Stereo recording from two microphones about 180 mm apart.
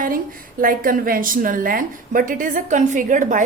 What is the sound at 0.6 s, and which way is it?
A woman's voice, 50° right (ahead or behind).